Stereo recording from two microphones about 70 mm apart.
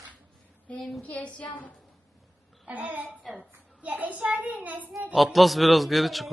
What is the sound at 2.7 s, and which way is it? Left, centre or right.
A child's voice, right.